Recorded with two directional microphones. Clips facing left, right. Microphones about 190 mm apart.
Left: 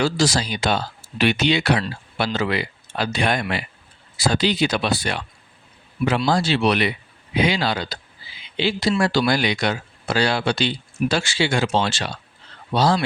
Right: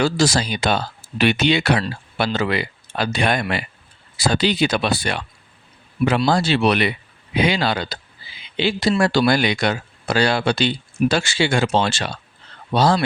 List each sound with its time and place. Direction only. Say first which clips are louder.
0.0 s speech: right 2 dB; 50° right (ahead or behind)
6.2 s speech: right 1 dB; 60° right (ahead or behind)